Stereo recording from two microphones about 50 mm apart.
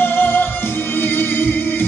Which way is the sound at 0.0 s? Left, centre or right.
Left.